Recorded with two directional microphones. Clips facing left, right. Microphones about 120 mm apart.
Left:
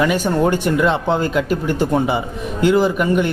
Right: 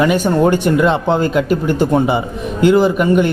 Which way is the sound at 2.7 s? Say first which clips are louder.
Right 3 dB; 20° right (ahead or behind).